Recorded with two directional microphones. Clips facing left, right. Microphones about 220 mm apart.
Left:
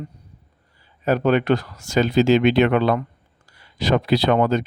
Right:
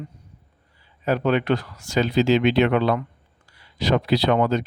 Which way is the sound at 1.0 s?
45° left (ahead or behind).